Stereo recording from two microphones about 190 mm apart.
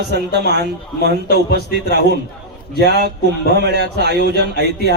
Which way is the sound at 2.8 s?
60° right (ahead or behind).